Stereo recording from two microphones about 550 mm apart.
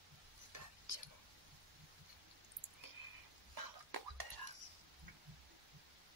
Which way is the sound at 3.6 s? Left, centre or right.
Right.